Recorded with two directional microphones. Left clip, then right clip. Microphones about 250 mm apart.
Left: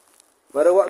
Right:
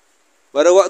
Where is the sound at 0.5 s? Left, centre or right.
Right.